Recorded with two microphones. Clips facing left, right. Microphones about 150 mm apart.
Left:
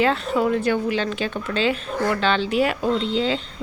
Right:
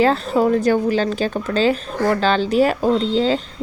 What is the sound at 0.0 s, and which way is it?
A woman's voice, 35° right (ahead or behind).